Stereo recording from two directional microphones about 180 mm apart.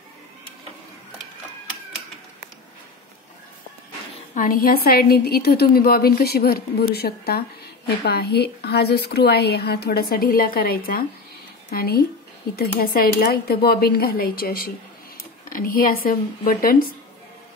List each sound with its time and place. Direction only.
4.4 s a woman's voice: 55° left (ahead or behind)